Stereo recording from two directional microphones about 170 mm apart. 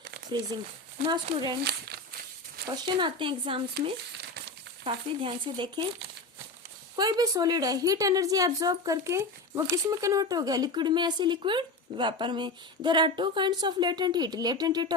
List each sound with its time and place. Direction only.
0.5 s a woman's voice: 25° right (ahead or behind)
1.6 s speech: 70° right (ahead or behind)
2.7 s a woman's voice: 25° right (ahead or behind)
4.2 s a sound: 75° right (ahead or behind)
4.8 s a woman's voice: 30° right (ahead or behind)
6.9 s a woman's voice: 20° right (ahead or behind)